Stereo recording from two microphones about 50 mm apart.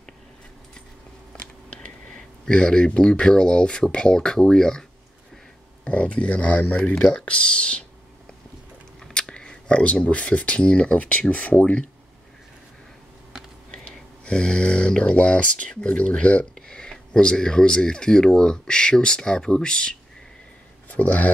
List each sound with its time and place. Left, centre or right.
1.3 s a sound: centre
2.1 s speech: centre
5.9 s speech: left
9.0 s speech: centre; by 11.8 s left
13.7 s speech: left
20.9 s speech: left